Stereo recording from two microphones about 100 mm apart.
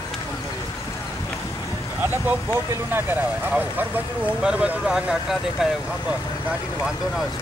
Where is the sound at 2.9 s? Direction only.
15° right (ahead or behind).